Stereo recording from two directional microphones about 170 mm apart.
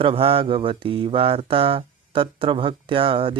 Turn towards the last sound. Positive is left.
turn(degrees=-30)  # may be behind; listen again after turning